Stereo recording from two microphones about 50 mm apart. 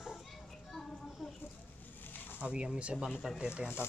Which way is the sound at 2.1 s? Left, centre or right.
Left.